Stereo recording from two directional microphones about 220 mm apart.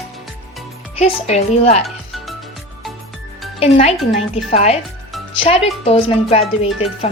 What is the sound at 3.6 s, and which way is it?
Speech, 25° left (ahead or behind).